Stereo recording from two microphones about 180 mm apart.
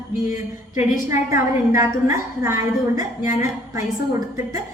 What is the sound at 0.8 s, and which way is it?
Speech, 45° left (ahead or behind).